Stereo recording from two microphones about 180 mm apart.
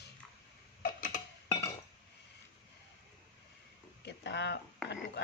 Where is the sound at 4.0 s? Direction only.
70° left (ahead or behind).